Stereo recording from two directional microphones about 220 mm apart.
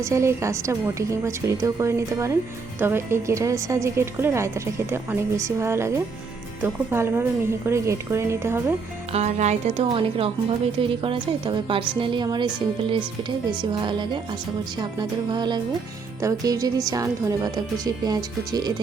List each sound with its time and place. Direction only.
0.0 s a woman's voice: 15° right (ahead or behind)
9.1 s a woman's voice: 30° right (ahead or behind)